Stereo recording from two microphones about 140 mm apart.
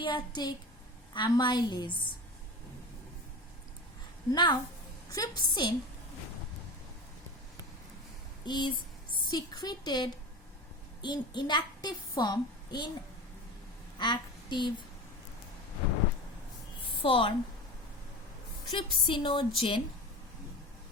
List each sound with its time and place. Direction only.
0.0 s a woman's voice: 30° left (ahead or behind)
4.3 s a woman's voice: 35° left (ahead or behind)
8.4 s a woman's voice: 30° left (ahead or behind)
14.0 s a woman's voice: 35° left (ahead or behind)
17.0 s a woman's voice: 40° left (ahead or behind)
18.6 s a woman's voice: 40° left (ahead or behind)